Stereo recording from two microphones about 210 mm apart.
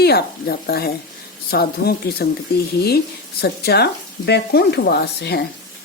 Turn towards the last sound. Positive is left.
turn(degrees=50)  # may be behind; listen again after turning